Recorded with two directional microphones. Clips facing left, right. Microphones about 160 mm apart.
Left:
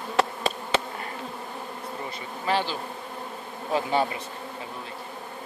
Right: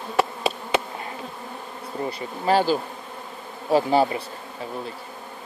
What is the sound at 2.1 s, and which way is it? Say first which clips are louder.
Speech: right 6 dB; 35° right (ahead or behind).